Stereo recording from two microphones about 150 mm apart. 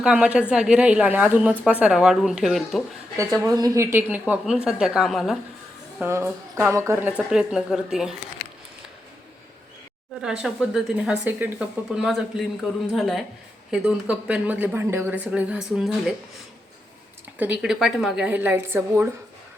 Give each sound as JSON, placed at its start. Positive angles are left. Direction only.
{"t": 0.0, "sound": "speech", "side_deg": -5}
{"t": 3.2, "sound": "speech", "side_deg": -20}
{"t": 6.0, "sound": "speech", "side_deg": -15}
{"t": 7.3, "sound": "speech", "side_deg": -5}
{"t": 10.2, "sound": "speech", "side_deg": -5}
{"t": 17.3, "sound": "speech", "side_deg": -10}